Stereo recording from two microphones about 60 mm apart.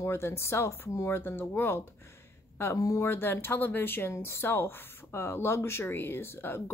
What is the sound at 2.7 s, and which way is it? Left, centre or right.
Speech, left.